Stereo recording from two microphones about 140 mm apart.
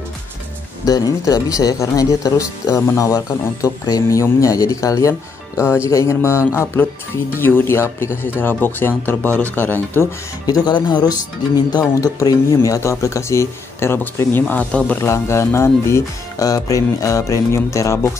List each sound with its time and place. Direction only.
0.8 s speech: 25° left (ahead or behind)
10.4 s speech: 30° left (ahead or behind)